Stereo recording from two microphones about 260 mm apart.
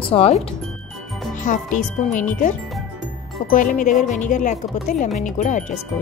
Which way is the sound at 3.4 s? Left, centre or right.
Left.